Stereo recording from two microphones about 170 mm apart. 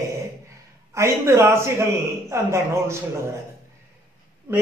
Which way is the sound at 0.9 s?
15° right (ahead or behind).